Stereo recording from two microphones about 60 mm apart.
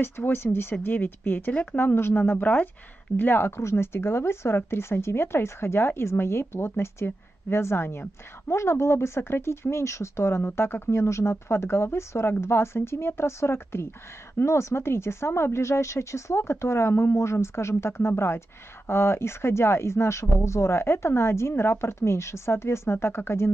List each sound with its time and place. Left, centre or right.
0.0 s speech: left
1.5 s speech: left
1.8 s speech: left